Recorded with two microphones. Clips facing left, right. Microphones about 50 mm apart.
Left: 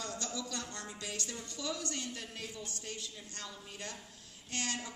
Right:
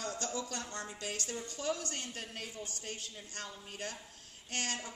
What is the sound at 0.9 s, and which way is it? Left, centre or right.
A woman's voice, right.